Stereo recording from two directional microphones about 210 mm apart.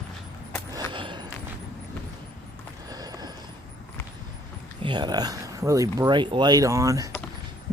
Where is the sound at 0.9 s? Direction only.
25° right (ahead or behind).